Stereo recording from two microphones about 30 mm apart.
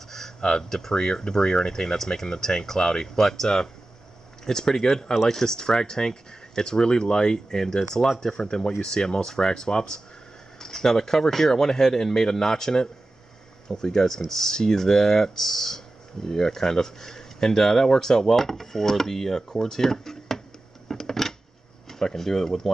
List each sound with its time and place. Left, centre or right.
0.4 s speech: left
10.6 s speech: centre
20.9 s a sound: centre
21.8 s speech: centre